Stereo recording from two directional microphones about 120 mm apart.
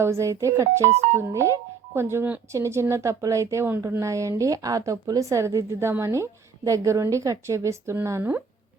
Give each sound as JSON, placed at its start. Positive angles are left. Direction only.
{"t": 0.0, "sound": "speech", "side_deg": -25}